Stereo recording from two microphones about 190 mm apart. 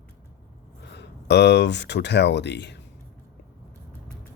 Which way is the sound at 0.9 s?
65° left (ahead or behind).